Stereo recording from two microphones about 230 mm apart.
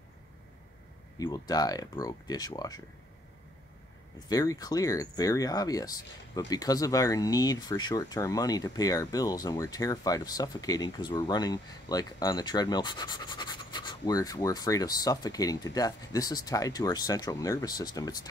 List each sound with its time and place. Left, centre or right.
1.1 s speech: centre
4.3 s speech: centre